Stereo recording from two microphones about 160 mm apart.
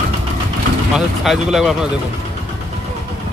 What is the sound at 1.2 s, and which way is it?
Speech, centre (ahead or behind).